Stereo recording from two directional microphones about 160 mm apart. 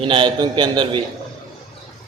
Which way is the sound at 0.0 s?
30° right (ahead or behind).